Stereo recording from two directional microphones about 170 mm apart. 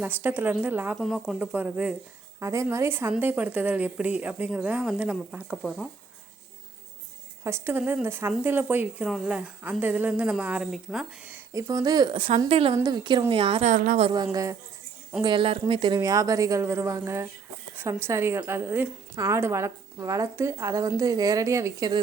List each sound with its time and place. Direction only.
0.0 s a woman's voice: 10° right (ahead or behind)
0.9 s a woman's voice: centre (ahead or behind)
7.4 s a woman's voice: 15° right (ahead or behind); by 12.7 s 35° right (ahead or behind)
12.7 s a woman's voice: 25° right (ahead or behind)
13.7 s a woman's voice: 50° right (ahead or behind)
15.2 s a woman's voice: 30° right (ahead or behind)